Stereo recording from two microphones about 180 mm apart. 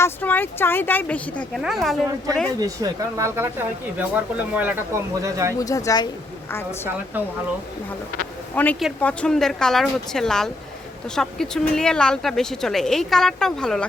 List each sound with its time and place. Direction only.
0.0 s speech: 10° left (ahead or behind)
2.6 s speech: 20° right (ahead or behind)
5.5 s speech: 20° left (ahead or behind)
8.5 s speech: 10° left (ahead or behind)